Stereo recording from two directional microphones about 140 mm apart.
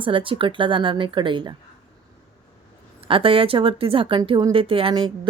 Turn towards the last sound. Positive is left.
turn(degrees=-35)  # may be behind; listen again after turning